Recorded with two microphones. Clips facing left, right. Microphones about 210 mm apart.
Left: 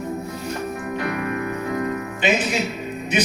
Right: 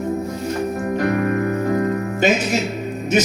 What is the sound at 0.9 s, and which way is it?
Music, 45° right (ahead or behind).